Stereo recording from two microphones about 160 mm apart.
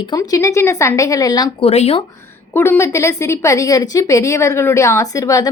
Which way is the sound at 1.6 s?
40° left (ahead or behind).